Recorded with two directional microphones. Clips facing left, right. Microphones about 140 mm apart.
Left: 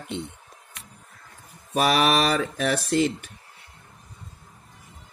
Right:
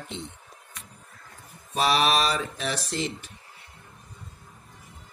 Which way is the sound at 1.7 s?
50° left (ahead or behind).